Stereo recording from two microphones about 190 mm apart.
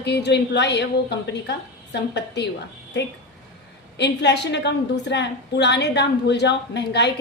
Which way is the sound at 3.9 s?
65° left (ahead or behind).